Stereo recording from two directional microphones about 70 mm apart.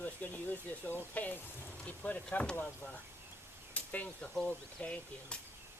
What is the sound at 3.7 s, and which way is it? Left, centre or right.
Arrow, left.